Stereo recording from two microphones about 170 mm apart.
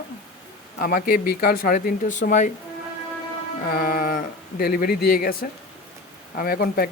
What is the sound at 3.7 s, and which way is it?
Speech, 60° left (ahead or behind).